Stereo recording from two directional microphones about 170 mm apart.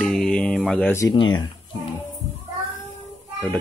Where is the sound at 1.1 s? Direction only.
30° left (ahead or behind).